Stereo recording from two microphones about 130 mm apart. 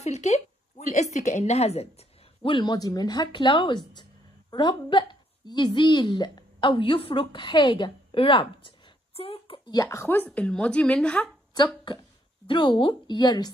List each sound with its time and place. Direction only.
0.0 s a woman's voice: 60° left (ahead or behind)
9.7 s speech: 25° left (ahead or behind)
10.2 s a woman's voice: 5° left (ahead or behind)
11.5 s a woman's voice: 35° left (ahead or behind)